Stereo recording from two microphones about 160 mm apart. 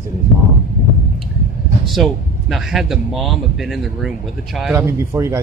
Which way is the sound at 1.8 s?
Centre (ahead or behind).